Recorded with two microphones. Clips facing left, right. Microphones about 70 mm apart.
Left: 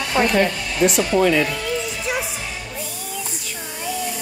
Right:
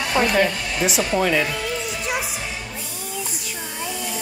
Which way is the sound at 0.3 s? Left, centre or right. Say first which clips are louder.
Left 1 dB; centre.